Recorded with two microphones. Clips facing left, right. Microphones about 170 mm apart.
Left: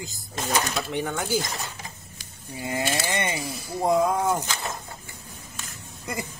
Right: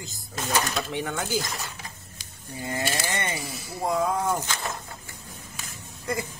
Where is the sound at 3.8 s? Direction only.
20° left (ahead or behind).